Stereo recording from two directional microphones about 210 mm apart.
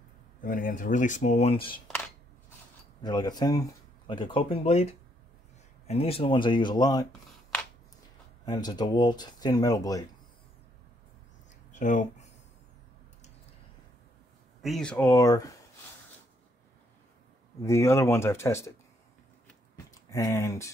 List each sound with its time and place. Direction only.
0.4 s speech: 40° left (ahead or behind)
3.0 s speech: 20° left (ahead or behind)
5.9 s speech: 25° left (ahead or behind)
8.5 s speech: 20° left (ahead or behind)
11.8 s speech: 35° left (ahead or behind)
14.6 s speech: centre (ahead or behind)
17.6 s speech: 15° left (ahead or behind)
20.1 s speech: 15° left (ahead or behind)